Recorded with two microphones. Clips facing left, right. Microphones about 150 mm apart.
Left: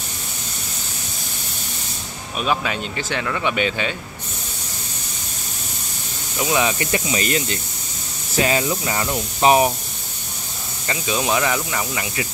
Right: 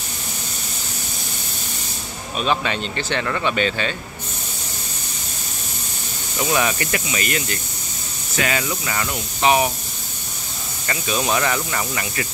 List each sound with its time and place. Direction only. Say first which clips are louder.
2.3 s speech: right 1 dB; 5° left (ahead or behind)
6.4 s speech: left 1 dB; 15° left (ahead or behind); by 9.7 s 35° left (ahead or behind)
10.9 s speech: even; 15° left (ahead or behind)